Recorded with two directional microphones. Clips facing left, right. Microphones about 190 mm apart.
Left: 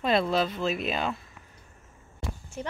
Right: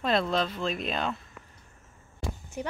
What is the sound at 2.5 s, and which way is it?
Speech, 15° right (ahead or behind).